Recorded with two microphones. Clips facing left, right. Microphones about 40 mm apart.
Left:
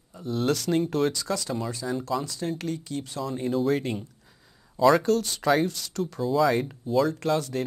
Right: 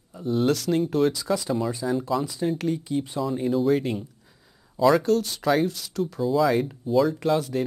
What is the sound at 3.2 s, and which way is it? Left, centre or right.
Speech, centre.